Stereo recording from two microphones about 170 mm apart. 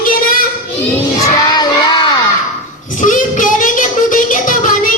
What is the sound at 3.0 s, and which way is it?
Child singing, 50° left (ahead or behind).